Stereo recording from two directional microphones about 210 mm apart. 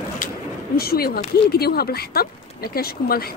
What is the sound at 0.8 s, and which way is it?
Speech, 45° left (ahead or behind).